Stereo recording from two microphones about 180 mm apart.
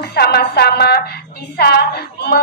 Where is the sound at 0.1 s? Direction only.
65° left (ahead or behind).